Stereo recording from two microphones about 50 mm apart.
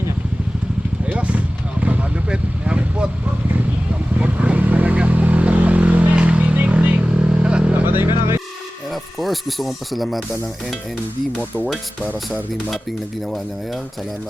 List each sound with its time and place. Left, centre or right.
1.0 s vehicle: right
1.8 s a sound: right
4.2 s vehicle: right
7.7 s vehicle: right
8.9 s speech: centre